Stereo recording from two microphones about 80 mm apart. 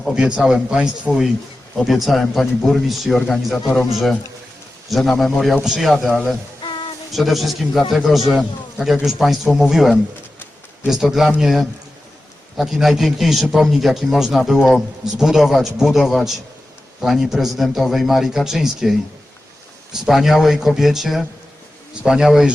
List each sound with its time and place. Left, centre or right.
0.1 s speech: centre
1.8 s a man's voice: centre
3.2 s a man's voice: centre
4.9 s a man's voice: centre
6.6 s a sound: left
7.1 s a man's voice: centre